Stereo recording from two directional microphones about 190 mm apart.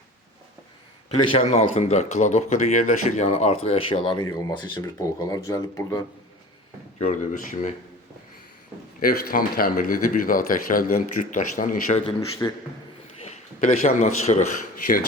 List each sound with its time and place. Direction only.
1.2 s speech: 30° left (ahead or behind)
7.0 s speech: 40° left (ahead or behind)
9.0 s speech: 50° left (ahead or behind)
12.4 s a man's voice: 15° left (ahead or behind)
13.2 s speech: 35° left (ahead or behind)